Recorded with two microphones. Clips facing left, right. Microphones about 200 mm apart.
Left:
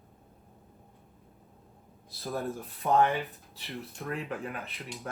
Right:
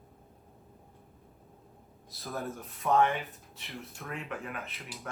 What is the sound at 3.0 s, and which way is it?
Speech, centre (ahead or behind).